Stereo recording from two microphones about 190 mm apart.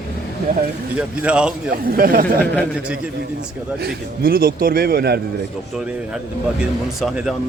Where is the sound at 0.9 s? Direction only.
5° right (ahead or behind).